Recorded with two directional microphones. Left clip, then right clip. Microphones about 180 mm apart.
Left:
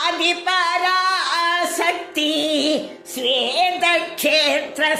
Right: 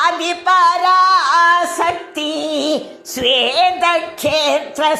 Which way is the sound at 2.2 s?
30° right (ahead or behind).